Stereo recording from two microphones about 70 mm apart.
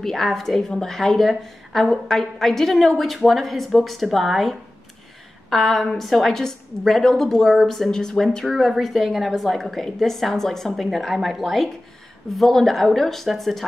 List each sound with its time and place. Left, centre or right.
0.0 s a woman's voice: centre